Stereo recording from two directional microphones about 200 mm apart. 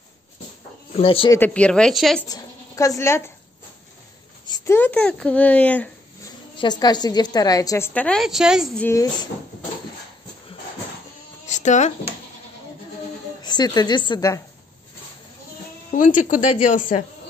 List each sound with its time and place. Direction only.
0.9 s speech: 25° left (ahead or behind)
1.4 s a woman's voice: 5° left (ahead or behind)
2.2 s speech: 15° left (ahead or behind)
4.5 s a woman's voice: 15° left (ahead or behind)
6.6 s a woman's voice: 20° left (ahead or behind); by 8.8 s centre (ahead or behind)
8.8 s a woman's voice: 20° left (ahead or behind)
11.4 s a sound: 35° left (ahead or behind)
13.4 s a woman's voice: 20° left (ahead or behind)
15.9 s speech: 40° left (ahead or behind)